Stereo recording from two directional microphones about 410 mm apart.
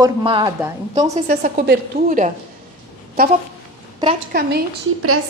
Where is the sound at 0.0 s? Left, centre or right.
Centre.